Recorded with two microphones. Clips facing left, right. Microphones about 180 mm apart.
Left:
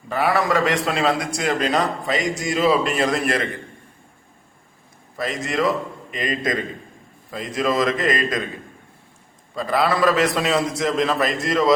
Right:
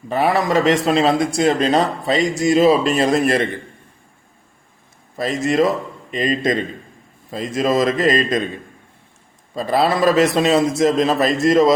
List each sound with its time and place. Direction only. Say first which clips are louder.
0.1 s a man's voice: right 3 dB; 25° right (ahead or behind)
5.1 s a man's voice: right 6 dB; 25° right (ahead or behind)
9.6 s a man's voice: right 3 dB; 25° right (ahead or behind)